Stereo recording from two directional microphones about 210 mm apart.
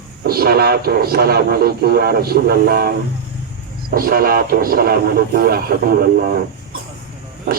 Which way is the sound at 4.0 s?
45° right (ahead or behind).